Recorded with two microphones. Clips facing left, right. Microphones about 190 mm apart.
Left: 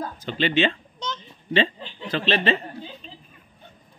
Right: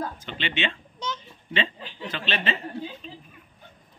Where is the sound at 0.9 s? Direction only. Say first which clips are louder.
Even; 10° right (ahead or behind).